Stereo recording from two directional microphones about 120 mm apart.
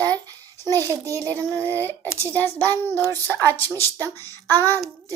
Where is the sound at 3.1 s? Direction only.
25° right (ahead or behind).